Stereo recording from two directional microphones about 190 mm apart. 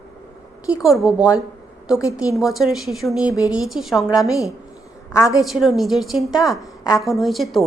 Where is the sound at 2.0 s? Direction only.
15° left (ahead or behind).